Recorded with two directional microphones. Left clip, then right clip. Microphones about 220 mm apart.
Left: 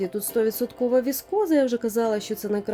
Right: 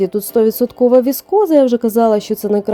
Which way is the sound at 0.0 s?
35° right (ahead or behind).